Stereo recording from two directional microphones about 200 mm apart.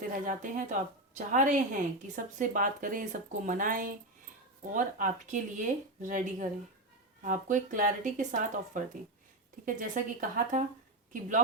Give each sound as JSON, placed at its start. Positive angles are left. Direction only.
{"t": 0.1, "sound": "a woman's voice", "side_deg": -40}